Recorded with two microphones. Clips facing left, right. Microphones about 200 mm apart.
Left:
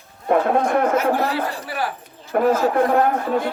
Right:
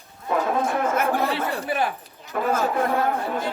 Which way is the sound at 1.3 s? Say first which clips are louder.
Even; 25° right (ahead or behind).